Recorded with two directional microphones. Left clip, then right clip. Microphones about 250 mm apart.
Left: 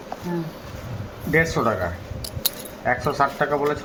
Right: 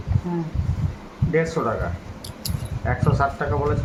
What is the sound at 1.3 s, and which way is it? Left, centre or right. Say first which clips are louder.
Speech: left 2 dB; centre.